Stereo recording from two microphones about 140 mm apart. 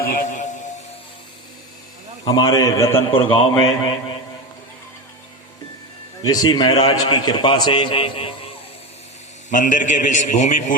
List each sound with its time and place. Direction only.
0.3 s music: 60° left (ahead or behind)
2.2 s a man's voice: 30° left (ahead or behind)
2.9 s a man's voice: 40° left (ahead or behind)
6.2 s a man's voice: 25° left (ahead or behind)
9.5 s a man's voice: 65° left (ahead or behind)